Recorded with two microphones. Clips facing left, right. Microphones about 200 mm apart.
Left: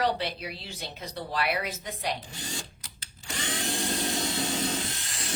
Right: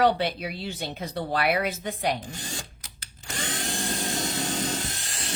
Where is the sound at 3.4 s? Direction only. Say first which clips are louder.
Even; 45° right (ahead or behind).